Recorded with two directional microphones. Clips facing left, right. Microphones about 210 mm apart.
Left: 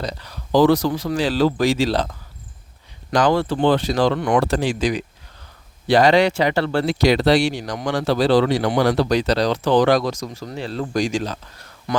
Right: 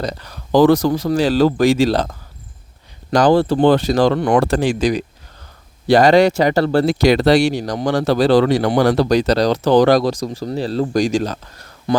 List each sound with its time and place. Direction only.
0.0 s speech: 45° right (ahead or behind)
11.9 s speech: 30° right (ahead or behind)